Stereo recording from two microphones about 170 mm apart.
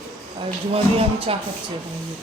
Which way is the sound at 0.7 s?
35° right (ahead or behind).